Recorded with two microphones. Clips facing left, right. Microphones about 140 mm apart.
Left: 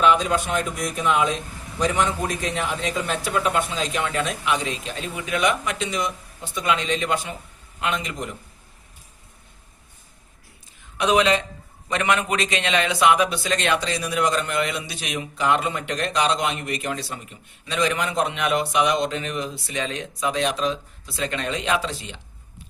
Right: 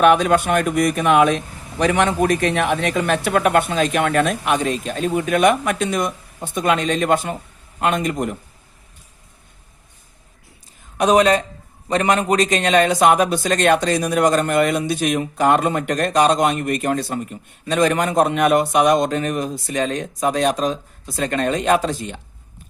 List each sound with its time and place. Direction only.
0.0 s a man's voice: 60° right (ahead or behind)
10.9 s a man's voice: 45° right (ahead or behind)